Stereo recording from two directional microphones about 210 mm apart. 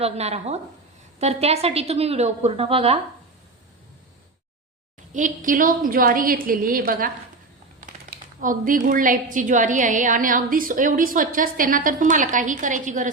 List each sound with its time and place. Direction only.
0.0 s a woman's voice: 30° right (ahead or behind)
5.1 s a woman's voice: 40° right (ahead or behind)
8.1 s a woman's voice: 40° right (ahead or behind)